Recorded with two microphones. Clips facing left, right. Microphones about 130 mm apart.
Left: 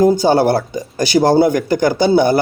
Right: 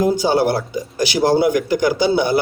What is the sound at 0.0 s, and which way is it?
Speech, 45° left (ahead or behind).